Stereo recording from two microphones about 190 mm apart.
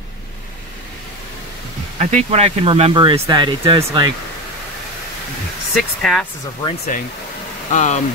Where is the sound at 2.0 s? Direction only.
35° right (ahead or behind).